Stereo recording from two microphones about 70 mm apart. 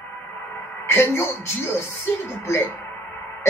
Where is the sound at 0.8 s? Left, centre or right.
Left.